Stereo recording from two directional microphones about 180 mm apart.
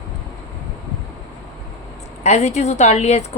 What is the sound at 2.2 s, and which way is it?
Speech, 40° left (ahead or behind).